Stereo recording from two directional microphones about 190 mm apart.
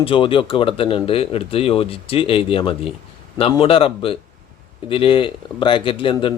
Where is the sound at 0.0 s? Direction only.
30° left (ahead or behind).